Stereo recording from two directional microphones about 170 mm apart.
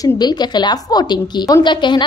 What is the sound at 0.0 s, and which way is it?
A woman's voice, 25° left (ahead or behind).